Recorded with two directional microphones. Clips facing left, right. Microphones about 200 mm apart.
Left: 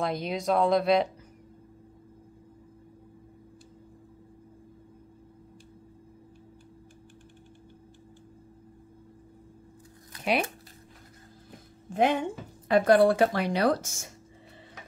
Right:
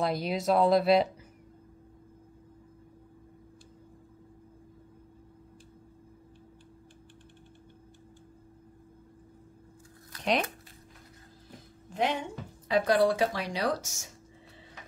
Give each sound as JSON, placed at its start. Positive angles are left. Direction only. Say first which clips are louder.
{"t": 0.0, "sound": "speech", "louder": "even", "side_deg": -5}
{"t": 11.9, "sound": "speech", "louder": "left 5 dB", "side_deg": 50}